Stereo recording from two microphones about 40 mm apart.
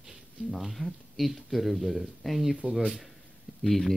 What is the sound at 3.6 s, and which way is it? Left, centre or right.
Speech, centre.